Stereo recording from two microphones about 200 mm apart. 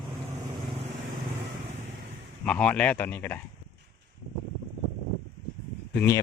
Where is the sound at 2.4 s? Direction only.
5° left (ahead or behind).